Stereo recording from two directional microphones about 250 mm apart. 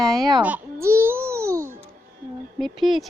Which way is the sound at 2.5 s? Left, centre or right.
Centre.